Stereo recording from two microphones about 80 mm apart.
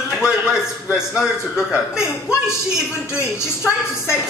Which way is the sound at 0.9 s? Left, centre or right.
Centre.